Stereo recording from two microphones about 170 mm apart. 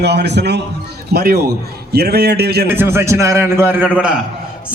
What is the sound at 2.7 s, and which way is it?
A man's voice, 15° right (ahead or behind).